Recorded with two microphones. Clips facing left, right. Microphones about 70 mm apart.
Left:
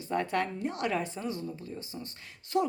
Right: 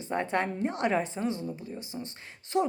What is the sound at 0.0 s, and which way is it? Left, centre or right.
A woman's voice, right.